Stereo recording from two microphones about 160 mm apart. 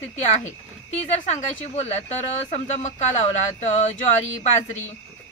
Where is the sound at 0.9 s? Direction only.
45° left (ahead or behind).